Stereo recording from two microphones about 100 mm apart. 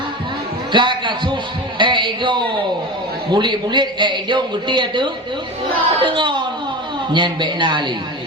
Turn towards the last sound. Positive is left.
turn(degrees=-50)  # may be behind; listen again after turning